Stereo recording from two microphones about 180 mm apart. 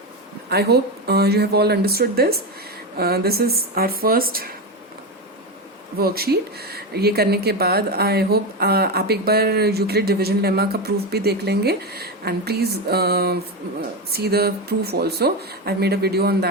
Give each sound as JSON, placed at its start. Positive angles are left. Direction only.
{"t": 0.5, "sound": "speech", "side_deg": -65}
{"t": 6.0, "sound": "speech", "side_deg": -60}